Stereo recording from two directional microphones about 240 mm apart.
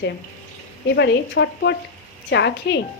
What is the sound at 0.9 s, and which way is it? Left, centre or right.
Speech, left.